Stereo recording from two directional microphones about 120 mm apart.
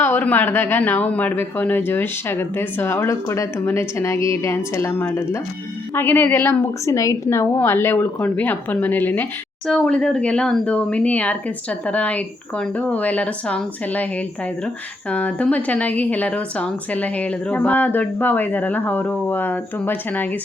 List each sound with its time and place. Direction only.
0.0 s a woman's voice: 15° left (ahead or behind)